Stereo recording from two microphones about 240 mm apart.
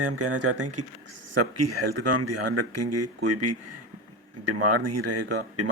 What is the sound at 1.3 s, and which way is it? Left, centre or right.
Speech, right.